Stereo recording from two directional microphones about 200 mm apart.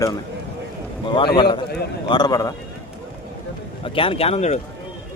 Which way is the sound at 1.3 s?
25° left (ahead or behind).